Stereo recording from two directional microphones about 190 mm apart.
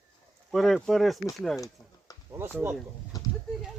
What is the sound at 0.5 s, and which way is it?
Speech, centre (ahead or behind).